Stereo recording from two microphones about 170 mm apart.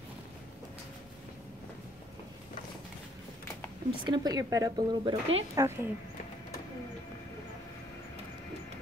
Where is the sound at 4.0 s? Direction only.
25° right (ahead or behind).